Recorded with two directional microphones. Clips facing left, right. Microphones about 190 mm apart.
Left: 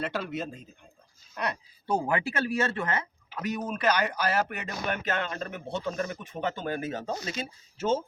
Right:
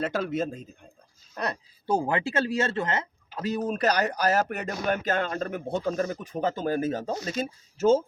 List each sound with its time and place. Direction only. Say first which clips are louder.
0.0 s speech: right 5 dB; 45° right (ahead or behind)
1.4 s speech: right 1 dB; 35° right (ahead or behind)